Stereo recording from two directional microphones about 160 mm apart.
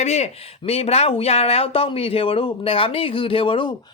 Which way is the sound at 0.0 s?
45° left (ahead or behind).